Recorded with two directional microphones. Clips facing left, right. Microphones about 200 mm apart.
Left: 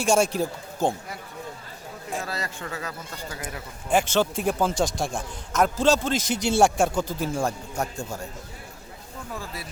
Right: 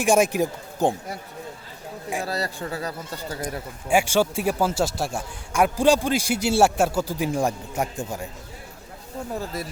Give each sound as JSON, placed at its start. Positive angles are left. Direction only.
{"t": 0.0, "sound": "a man's voice", "side_deg": -15}
{"t": 2.2, "sound": "speech", "side_deg": -35}
{"t": 3.8, "sound": "a man's voice", "side_deg": -10}
{"t": 9.3, "sound": "speech", "side_deg": -40}